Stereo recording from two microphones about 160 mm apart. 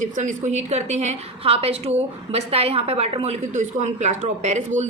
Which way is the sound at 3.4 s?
50° right (ahead or behind).